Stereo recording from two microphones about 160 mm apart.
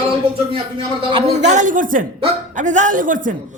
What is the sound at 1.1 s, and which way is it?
A woman's voice, 45° right (ahead or behind).